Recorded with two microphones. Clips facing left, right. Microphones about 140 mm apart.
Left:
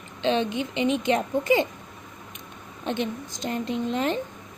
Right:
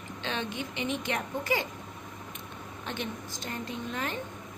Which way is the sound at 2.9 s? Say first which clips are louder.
Left 9 dB; 20° left (ahead or behind).